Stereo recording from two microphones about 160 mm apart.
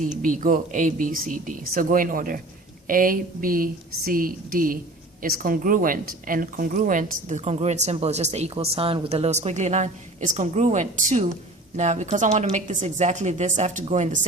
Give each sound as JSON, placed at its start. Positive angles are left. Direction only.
{"t": 0.0, "sound": "a woman's voice", "side_deg": -55}